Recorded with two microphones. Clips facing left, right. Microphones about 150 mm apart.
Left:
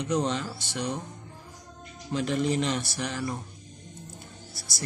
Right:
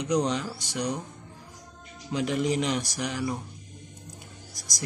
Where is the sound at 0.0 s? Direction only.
15° right (ahead or behind).